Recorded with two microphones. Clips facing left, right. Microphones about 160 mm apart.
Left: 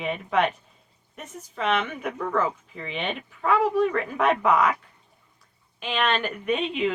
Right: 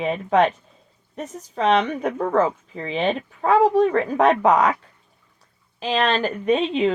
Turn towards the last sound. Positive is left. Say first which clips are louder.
# right 6 dB
turn(degrees=-35)  # may be behind; listen again after turning